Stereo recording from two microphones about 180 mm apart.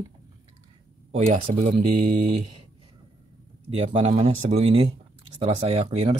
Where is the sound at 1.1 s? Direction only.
40° right (ahead or behind).